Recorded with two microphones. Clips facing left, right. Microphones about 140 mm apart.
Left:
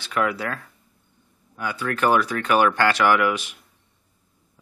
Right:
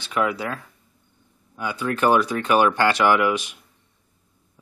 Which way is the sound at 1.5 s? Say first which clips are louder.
Right 1 dB; 20° right (ahead or behind).